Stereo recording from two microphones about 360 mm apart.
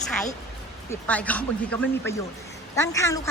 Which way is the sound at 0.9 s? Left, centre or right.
Centre.